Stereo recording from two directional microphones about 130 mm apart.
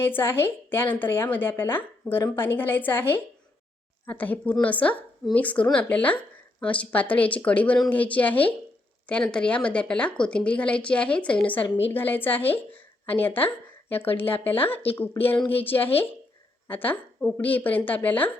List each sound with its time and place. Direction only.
0.0 s speech: 15° left (ahead or behind)